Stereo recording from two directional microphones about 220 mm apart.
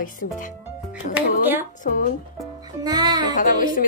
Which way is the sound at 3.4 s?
35° left (ahead or behind).